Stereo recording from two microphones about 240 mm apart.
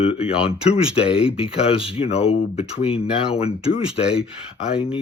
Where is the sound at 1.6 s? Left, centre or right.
Left.